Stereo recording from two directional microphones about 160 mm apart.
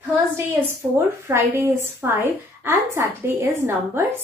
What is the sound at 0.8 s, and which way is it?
A woman's voice, 15° right (ahead or behind).